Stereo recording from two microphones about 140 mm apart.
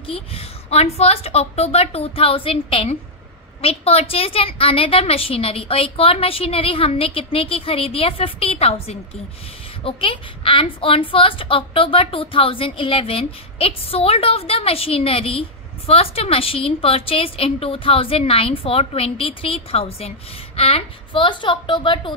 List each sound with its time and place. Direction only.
0.0 s a woman's voice: 45° left (ahead or behind)